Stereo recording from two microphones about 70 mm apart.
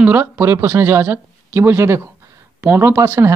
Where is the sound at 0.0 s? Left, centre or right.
Right.